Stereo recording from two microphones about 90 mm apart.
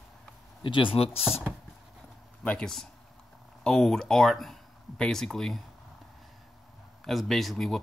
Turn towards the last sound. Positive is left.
turn(degrees=0)  # may be behind; listen again after turning